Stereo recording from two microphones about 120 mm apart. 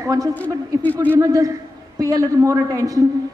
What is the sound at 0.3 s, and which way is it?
Speech, 15° left (ahead or behind).